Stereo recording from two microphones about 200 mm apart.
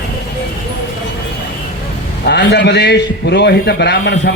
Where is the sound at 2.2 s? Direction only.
60° left (ahead or behind).